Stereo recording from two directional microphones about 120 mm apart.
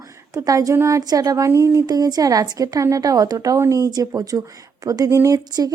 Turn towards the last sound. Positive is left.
turn(degrees=-30)  # may be behind; listen again after turning